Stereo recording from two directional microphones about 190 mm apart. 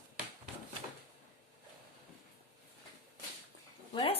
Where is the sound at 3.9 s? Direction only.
30° left (ahead or behind).